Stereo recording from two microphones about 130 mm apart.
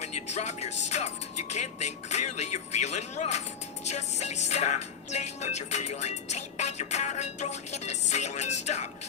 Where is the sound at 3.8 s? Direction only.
60° left (ahead or behind).